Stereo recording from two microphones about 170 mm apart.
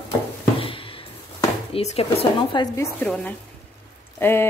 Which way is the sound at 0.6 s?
30° left (ahead or behind).